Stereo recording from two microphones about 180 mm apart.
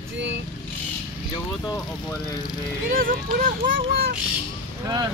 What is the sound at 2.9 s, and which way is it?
Speech, 50° right (ahead or behind).